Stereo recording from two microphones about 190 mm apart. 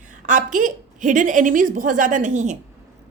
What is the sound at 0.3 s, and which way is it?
A woman's voice, 40° right (ahead or behind).